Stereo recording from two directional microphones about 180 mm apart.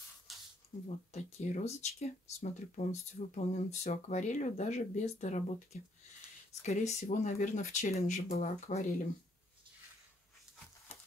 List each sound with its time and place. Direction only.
0.8 s speech: 40° left (ahead or behind)